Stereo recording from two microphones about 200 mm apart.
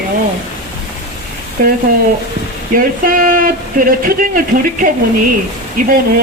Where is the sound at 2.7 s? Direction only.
45° right (ahead or behind).